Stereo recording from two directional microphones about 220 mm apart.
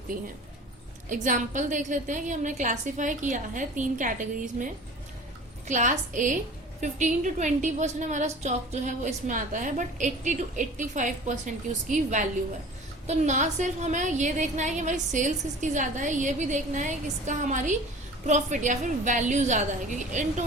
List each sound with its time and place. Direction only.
1.1 s a woman's voice: 35° right (ahead or behind)